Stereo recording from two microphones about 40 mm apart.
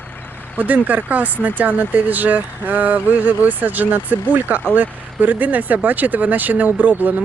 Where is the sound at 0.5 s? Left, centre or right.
Right.